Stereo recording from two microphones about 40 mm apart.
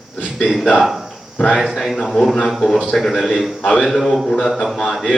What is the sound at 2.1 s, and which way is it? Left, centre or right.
Speech, centre.